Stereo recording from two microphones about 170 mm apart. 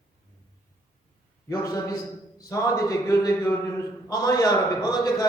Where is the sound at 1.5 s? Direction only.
20° left (ahead or behind).